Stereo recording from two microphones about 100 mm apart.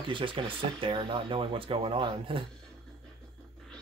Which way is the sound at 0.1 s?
55° right (ahead or behind).